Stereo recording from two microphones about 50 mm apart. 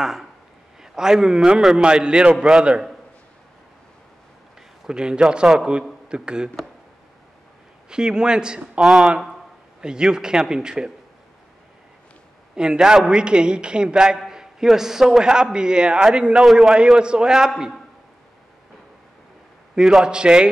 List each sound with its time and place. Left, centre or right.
0.0 s a man's voice: centre
4.8 s a man's voice: centre
7.9 s a man's voice: centre
8.8 s a man's voice: centre
12.5 s a man's voice: centre
16.3 s a man's voice: centre
19.8 s a man's voice: centre